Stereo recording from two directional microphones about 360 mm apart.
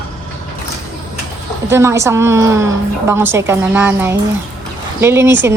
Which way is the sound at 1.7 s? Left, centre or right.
Centre.